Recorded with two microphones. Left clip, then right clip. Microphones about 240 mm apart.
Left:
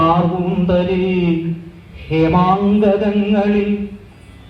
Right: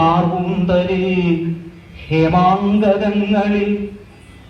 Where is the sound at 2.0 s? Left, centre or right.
Right.